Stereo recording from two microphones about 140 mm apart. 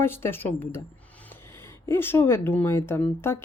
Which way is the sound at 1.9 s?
15° left (ahead or behind).